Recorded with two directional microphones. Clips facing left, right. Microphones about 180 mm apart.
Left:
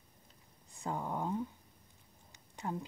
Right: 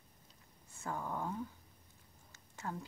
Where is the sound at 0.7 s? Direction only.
20° left (ahead or behind).